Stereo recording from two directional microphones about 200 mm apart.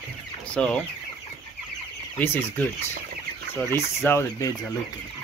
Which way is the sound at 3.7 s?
10° left (ahead or behind).